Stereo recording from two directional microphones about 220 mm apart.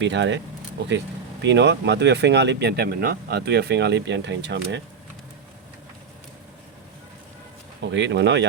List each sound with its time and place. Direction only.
0.0 s speech: 55° right (ahead or behind)
7.9 s speech: 55° right (ahead or behind)